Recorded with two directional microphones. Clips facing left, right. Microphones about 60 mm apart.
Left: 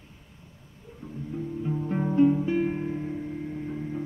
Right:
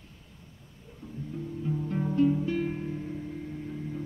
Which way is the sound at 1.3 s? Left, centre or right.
Left.